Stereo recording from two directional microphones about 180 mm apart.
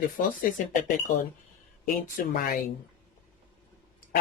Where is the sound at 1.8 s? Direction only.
50° left (ahead or behind).